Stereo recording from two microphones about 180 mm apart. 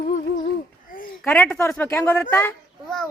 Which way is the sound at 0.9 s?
50° left (ahead or behind).